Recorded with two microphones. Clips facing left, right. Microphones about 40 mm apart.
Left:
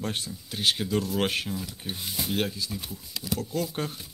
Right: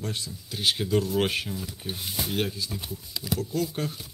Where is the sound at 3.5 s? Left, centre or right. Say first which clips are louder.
Right 1 dB; centre.